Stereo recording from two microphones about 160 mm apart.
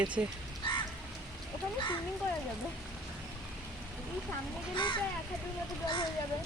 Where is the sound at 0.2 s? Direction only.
10° right (ahead or behind).